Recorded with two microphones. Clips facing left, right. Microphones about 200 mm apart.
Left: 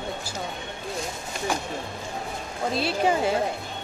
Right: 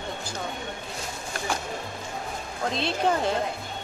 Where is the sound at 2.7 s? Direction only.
5° left (ahead or behind).